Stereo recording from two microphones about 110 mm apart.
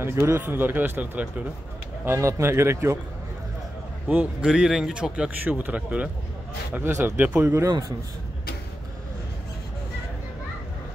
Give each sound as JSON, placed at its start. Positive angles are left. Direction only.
{"t": 0.0, "sound": "speech", "side_deg": -25}
{"t": 4.1, "sound": "speech", "side_deg": -15}